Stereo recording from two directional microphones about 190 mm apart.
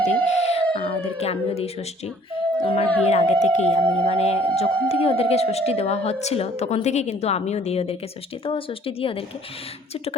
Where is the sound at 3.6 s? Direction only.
10° left (ahead or behind).